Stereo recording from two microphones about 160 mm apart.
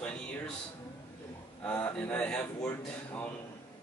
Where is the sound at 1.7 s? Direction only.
10° left (ahead or behind).